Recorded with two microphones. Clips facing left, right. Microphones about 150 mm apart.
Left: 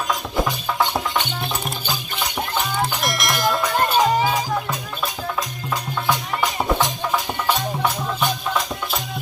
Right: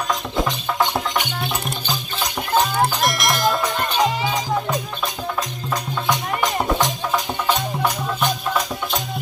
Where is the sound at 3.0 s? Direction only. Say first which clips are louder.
Right 2 dB; centre (ahead or behind).